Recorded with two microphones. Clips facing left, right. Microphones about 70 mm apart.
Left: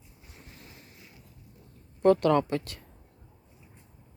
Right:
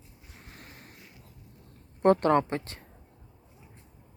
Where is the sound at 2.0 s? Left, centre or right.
Right.